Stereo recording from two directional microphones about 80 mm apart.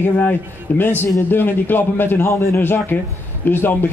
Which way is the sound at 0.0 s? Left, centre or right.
Left.